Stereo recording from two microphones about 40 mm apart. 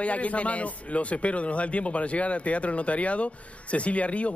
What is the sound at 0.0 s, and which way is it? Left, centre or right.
Speech, left.